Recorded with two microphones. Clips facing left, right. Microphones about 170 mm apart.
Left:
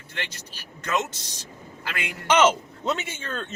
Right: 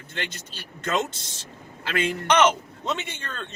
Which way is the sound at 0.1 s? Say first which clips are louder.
Right 2 dB; 25° right (ahead or behind).